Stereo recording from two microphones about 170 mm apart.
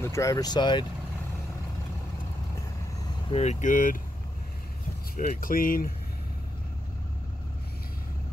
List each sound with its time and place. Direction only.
0.0 s speech: 15° left (ahead or behind)
3.3 s speech: 40° left (ahead or behind)
5.1 s speech: 55° left (ahead or behind)